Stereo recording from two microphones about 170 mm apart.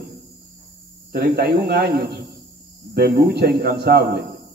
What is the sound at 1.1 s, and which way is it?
Speech, 70° right (ahead or behind).